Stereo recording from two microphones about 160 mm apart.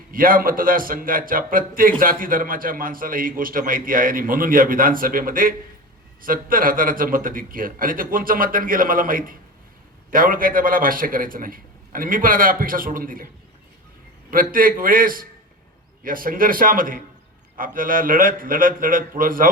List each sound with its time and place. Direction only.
0.1 s a man's voice: 60° right (ahead or behind)
14.3 s a man's voice: 60° right (ahead or behind)